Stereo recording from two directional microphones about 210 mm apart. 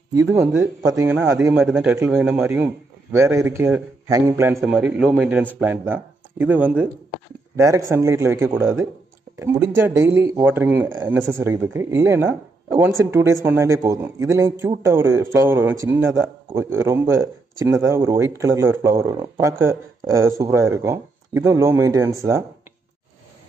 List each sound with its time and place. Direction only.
0.1 s a man's voice: 15° right (ahead or behind)